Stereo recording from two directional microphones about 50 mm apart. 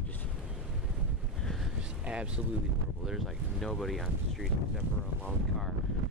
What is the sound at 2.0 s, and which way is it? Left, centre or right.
Speech, right.